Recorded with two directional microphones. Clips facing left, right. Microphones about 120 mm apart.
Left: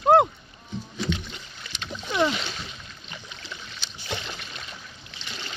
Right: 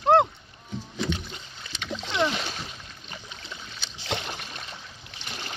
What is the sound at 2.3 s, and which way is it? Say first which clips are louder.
Splash: even; 45° right (ahead or behind).